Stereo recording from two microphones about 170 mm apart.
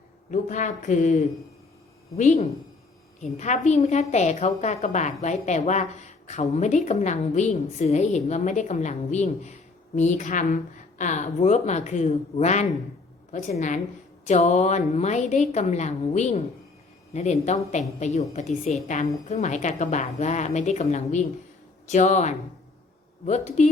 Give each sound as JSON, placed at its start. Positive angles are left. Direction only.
{"t": 0.3, "sound": "a woman's voice", "side_deg": 45}
{"t": 17.4, "sound": "a woman's voice", "side_deg": 45}